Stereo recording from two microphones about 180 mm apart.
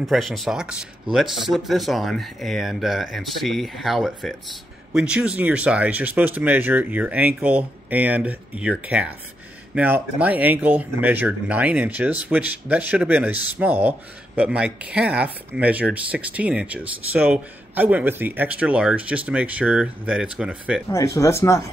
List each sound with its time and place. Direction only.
0.0 s speech: centre (ahead or behind)
20.9 s speech: 15° left (ahead or behind)